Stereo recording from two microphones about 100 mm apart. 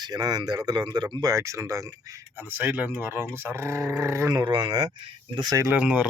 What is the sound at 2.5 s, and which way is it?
Speech, 20° right (ahead or behind).